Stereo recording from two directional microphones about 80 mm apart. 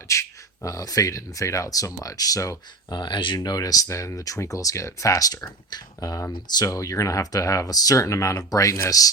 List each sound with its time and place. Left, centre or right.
0.1 s speech: left
2.9 s speech: left
6.3 s speech: left